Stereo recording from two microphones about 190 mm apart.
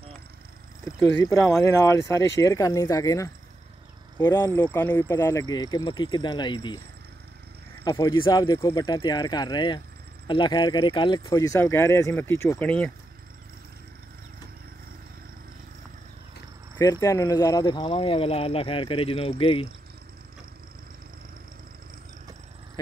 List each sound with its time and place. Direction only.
0.8 s speech: 15° left (ahead or behind)
7.8 s speech: 25° left (ahead or behind); by 12.9 s 10° left (ahead or behind)
16.7 s speech: 15° left (ahead or behind)